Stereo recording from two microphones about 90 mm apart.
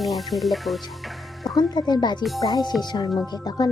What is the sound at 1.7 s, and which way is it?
A child's voice, 50° left (ahead or behind).